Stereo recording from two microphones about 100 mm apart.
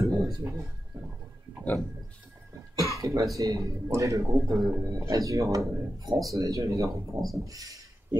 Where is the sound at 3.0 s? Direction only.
30° right (ahead or behind).